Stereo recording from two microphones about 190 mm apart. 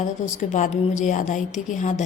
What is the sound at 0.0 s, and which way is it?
Speech, 40° left (ahead or behind).